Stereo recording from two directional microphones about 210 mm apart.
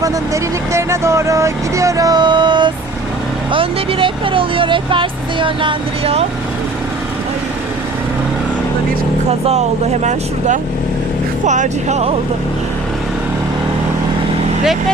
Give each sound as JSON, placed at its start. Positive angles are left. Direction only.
{"t": 0.7, "sound": "music", "side_deg": -15}
{"t": 3.5, "sound": "speech", "side_deg": -25}
{"t": 9.5, "sound": "speech", "side_deg": -30}